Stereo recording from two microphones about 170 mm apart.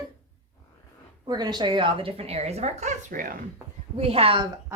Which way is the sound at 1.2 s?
25° right (ahead or behind).